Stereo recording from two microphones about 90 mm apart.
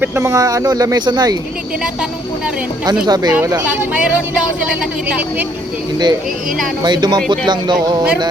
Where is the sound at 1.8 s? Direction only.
10° right (ahead or behind).